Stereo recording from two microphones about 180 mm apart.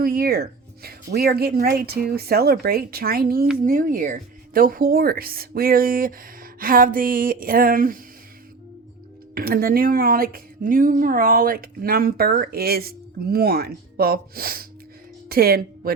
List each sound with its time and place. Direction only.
0.0 s speech: 55° right (ahead or behind)
9.3 s speech: 55° right (ahead or behind)